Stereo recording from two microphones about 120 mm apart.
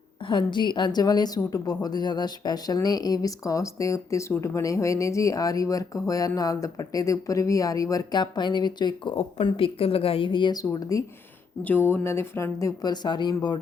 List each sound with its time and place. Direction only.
0.3 s a woman's voice: 40° left (ahead or behind)
11.6 s speech: 20° left (ahead or behind); by 13.6 s 40° left (ahead or behind)